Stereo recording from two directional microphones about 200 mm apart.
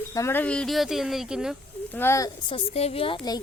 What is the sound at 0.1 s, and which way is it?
Speech, 15° left (ahead or behind).